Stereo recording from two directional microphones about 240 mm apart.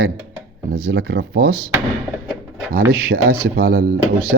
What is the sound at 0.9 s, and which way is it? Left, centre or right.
Speech, right.